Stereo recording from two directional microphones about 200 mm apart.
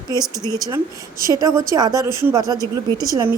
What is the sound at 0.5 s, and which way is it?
Speech, 20° right (ahead or behind).